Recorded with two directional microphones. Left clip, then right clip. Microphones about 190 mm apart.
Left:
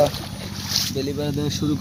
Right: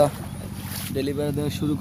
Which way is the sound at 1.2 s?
Centre (ahead or behind).